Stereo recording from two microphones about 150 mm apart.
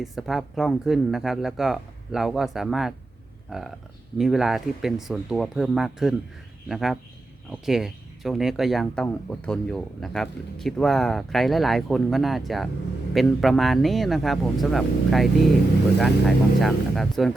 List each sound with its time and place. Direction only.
0.0 s speech: centre (ahead or behind)